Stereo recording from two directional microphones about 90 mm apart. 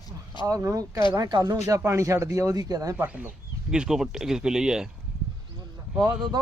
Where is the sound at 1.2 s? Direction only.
50° right (ahead or behind).